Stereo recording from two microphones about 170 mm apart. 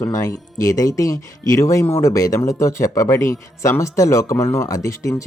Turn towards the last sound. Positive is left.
turn(degrees=20)  # may be behind; listen again after turning